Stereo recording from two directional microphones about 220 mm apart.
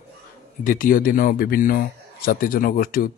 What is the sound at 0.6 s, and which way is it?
A man's voice, 40° left (ahead or behind).